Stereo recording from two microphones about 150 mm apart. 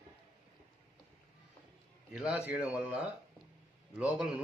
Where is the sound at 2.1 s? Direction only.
10° right (ahead or behind).